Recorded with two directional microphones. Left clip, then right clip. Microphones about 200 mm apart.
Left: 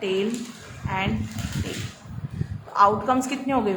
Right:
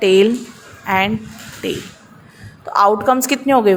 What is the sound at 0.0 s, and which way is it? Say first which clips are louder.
A woman's voice: right 13 dB; 50° right (ahead or behind).